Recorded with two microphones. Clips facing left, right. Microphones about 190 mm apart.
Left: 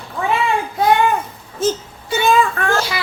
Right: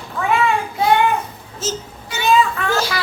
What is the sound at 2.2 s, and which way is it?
Child singing, 50° left (ahead or behind).